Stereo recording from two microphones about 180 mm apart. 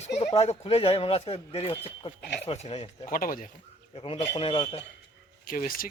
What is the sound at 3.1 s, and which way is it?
Speech, 50° left (ahead or behind).